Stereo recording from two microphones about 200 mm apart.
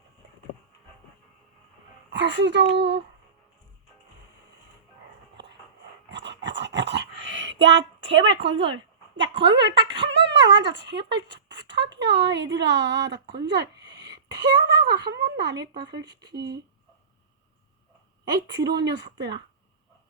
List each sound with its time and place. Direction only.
2.1 s a child's voice: 60° right (ahead or behind)
6.1 s dog: 60° right (ahead or behind)
9.5 s a woman's voice: 65° right (ahead or behind)
18.5 s a child's voice: 60° right (ahead or behind)